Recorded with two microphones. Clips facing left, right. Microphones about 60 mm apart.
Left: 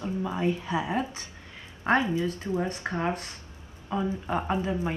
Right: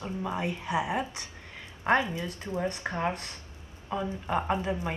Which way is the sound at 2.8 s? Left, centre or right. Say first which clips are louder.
Left 1 dB; right.